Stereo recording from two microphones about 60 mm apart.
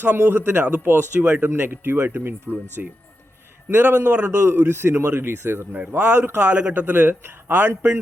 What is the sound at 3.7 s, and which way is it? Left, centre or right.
Speech, right.